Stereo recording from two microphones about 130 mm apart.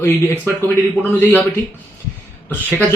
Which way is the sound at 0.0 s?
20° left (ahead or behind).